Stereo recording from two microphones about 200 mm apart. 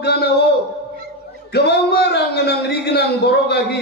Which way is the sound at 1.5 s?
55° left (ahead or behind).